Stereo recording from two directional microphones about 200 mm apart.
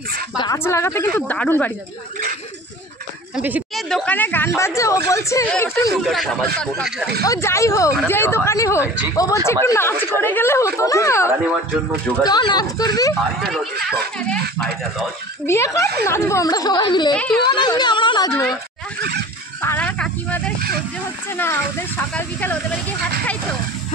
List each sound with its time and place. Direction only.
0.4 s speech: 15° left (ahead or behind)
3.3 s a woman's voice: 5° right (ahead or behind)
3.9 s speech: 5° left (ahead or behind)
6.0 s speech: centre (ahead or behind)
7.2 s speech: 15° left (ahead or behind)
13.4 s speech: centre (ahead or behind)
15.4 s speech: 15° left (ahead or behind)
17.1 s speech: 5° left (ahead or behind)
17.5 s speech: 20° left (ahead or behind)
19.6 s snake: 10° left (ahead or behind)
21.3 s speech: 10° left (ahead or behind)